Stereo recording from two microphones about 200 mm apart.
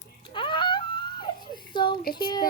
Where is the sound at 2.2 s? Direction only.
25° left (ahead or behind).